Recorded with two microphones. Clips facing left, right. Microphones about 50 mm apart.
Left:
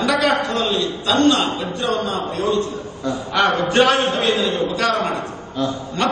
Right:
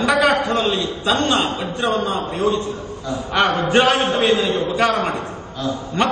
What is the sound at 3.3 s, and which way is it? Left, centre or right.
A man's voice, right.